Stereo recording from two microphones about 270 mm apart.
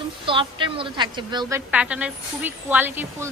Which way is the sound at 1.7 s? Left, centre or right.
Centre.